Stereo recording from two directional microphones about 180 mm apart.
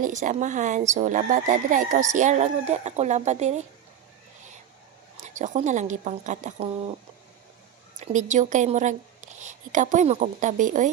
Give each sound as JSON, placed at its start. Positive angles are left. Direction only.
{"t": 0.0, "sound": "speech", "side_deg": -45}
{"t": 5.2, "sound": "speech", "side_deg": -40}
{"t": 8.0, "sound": "speech", "side_deg": -40}